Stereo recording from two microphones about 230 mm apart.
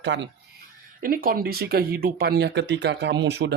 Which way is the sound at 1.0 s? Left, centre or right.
Right.